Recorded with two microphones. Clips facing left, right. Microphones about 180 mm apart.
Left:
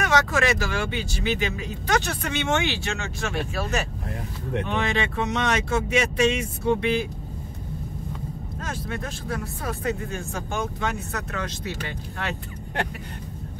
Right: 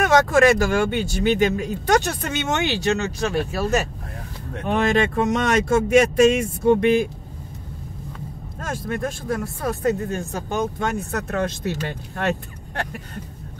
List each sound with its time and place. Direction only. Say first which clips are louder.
0.0 s speech: right 7 dB; 45° right (ahead or behind)
8.5 s speech: right 6 dB; 50° right (ahead or behind)